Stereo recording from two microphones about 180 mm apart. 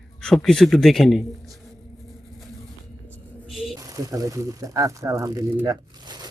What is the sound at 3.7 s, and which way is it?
Speech, 20° right (ahead or behind).